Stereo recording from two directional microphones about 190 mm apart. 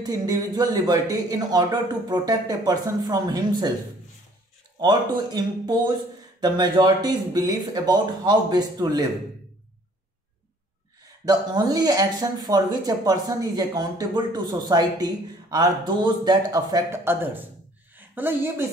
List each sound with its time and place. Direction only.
0.0 s speech: 20° right (ahead or behind)
4.7 s speech: 20° right (ahead or behind)
11.2 s a woman's voice: 20° right (ahead or behind)